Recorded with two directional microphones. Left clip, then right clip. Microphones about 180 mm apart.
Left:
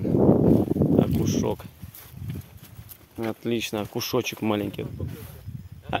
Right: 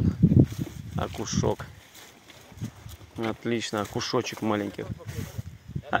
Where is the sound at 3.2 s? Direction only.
30° left (ahead or behind).